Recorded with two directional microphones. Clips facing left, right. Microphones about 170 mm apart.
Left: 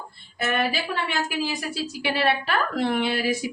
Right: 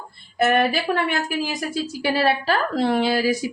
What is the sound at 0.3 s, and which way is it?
A woman's voice, 50° right (ahead or behind).